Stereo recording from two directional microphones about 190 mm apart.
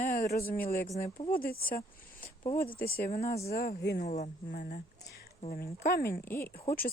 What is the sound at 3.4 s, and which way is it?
Speech, 50° left (ahead or behind).